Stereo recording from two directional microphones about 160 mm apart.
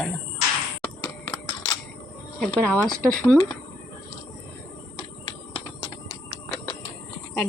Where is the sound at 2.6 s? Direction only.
5° left (ahead or behind).